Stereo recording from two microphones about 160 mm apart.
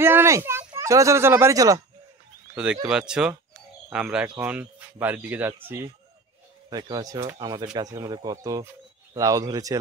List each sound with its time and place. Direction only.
0.0 s speech: 15° right (ahead or behind)
2.5 s speech: 5° right (ahead or behind); by 9.8 s 20° right (ahead or behind)